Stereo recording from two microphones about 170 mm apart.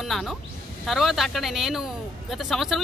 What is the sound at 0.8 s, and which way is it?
Speech, centre (ahead or behind).